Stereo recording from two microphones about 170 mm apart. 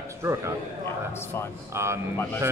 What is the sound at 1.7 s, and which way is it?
Speech, 15° right (ahead or behind).